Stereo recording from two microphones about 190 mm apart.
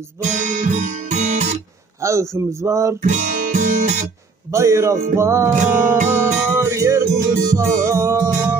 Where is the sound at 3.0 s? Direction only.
40° right (ahead or behind).